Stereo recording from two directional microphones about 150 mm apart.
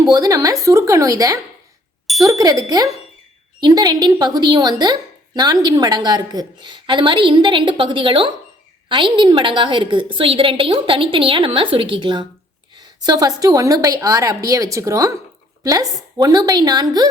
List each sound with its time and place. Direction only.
0.0 s a woman's voice: 25° right (ahead or behind)